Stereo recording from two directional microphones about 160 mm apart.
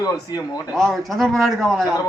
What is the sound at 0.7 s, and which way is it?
Speech, centre (ahead or behind).